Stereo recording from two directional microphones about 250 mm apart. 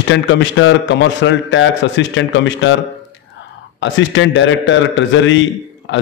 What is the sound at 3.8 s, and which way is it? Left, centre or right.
A man's voice, left.